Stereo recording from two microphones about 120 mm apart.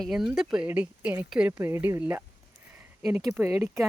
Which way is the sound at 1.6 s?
20° right (ahead or behind).